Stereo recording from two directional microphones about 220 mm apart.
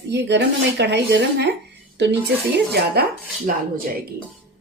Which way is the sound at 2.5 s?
50° right (ahead or behind).